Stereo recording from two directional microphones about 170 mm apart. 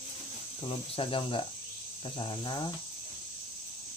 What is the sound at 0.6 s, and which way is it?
Speech, 35° left (ahead or behind).